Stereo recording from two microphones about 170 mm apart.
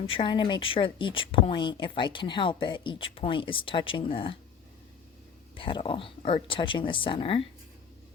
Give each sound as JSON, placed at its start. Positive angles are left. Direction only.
{"t": 0.1, "sound": "speech", "side_deg": 30}
{"t": 5.5, "sound": "speech", "side_deg": 30}